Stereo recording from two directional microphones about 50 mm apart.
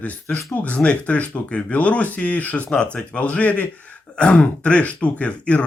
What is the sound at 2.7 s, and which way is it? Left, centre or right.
Speech, left.